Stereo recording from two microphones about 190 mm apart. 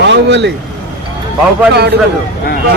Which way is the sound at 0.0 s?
65° right (ahead or behind).